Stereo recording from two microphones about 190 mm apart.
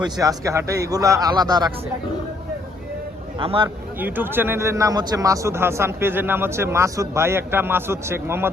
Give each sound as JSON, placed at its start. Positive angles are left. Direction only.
{"t": 0.0, "sound": "a man's voice", "side_deg": -20}
{"t": 3.3, "sound": "a man's voice", "side_deg": -25}
{"t": 3.9, "sound": "a man's voice", "side_deg": -10}